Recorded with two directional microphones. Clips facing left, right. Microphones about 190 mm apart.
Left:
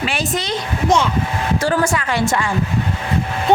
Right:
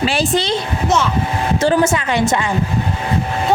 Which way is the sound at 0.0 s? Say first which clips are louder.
Right 5 dB; 30° right (ahead or behind).